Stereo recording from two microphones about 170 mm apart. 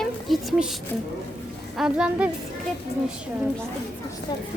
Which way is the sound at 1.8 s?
5° right (ahead or behind).